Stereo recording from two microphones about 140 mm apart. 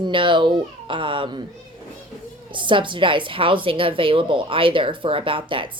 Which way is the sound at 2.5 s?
35° right (ahead or behind).